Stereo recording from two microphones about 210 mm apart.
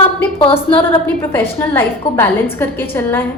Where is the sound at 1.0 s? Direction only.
10° left (ahead or behind).